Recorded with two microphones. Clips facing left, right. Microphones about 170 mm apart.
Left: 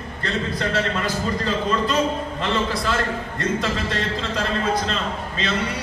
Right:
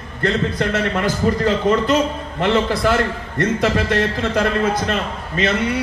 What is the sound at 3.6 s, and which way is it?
A man's voice, 60° right (ahead or behind).